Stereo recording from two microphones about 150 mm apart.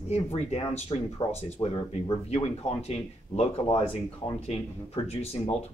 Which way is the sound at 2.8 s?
45° left (ahead or behind).